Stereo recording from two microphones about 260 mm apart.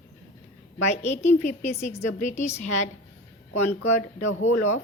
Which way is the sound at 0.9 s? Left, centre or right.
Left.